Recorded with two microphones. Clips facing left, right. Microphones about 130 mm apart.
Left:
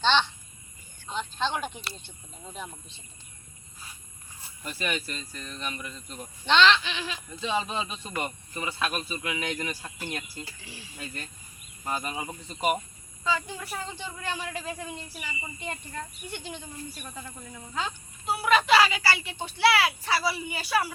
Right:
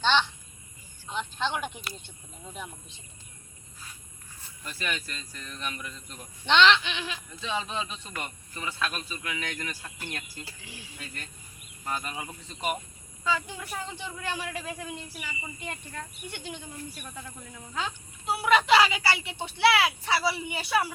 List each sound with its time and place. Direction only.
0.0 s a sound: 10° right (ahead or behind)
1.4 s speech: 10° right (ahead or behind)
4.6 s speech: 10° left (ahead or behind)
6.5 s speech: 15° right (ahead or behind)
6.7 s a man's voice: 5° left (ahead or behind)
10.6 s speech: 15° right (ahead or behind)
10.9 s speech: 10° left (ahead or behind)
13.5 s a man's voice: 5° right (ahead or behind)
17.1 s a man's voice: 5° left (ahead or behind)
18.3 s speech: 20° right (ahead or behind)